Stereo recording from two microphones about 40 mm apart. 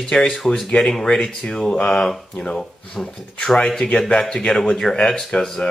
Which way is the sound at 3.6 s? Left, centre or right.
Centre.